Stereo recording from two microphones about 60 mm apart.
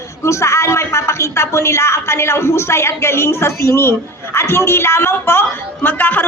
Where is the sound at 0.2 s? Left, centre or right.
Left.